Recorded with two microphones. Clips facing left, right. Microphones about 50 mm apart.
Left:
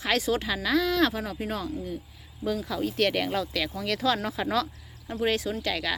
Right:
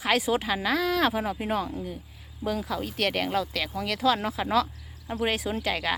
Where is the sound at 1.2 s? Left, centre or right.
Centre.